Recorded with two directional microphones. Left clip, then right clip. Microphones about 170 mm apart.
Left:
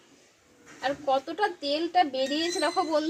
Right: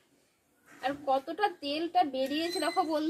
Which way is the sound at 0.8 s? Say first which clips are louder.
Left 3 dB; 20° right (ahead or behind).